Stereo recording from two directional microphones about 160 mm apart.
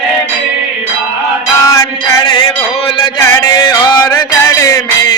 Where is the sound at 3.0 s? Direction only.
25° left (ahead or behind).